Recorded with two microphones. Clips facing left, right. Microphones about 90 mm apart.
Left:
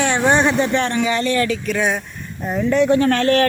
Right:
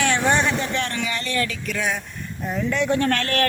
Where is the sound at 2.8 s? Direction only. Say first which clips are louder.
Left 7 dB; 10° left (ahead or behind).